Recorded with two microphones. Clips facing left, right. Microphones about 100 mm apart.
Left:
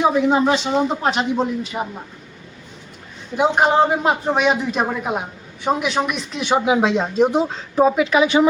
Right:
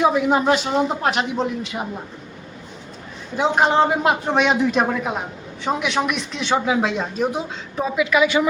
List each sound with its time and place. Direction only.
0.0 s speech: 5° right (ahead or behind)
3.3 s speech: 5° left (ahead or behind)
6.4 s speech: 20° left (ahead or behind)